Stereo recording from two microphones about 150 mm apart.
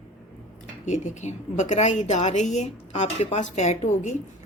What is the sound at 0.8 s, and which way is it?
A woman's voice, 55° left (ahead or behind).